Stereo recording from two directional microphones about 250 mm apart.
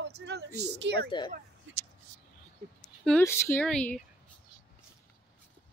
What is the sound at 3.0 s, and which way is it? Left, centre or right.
Speech, centre.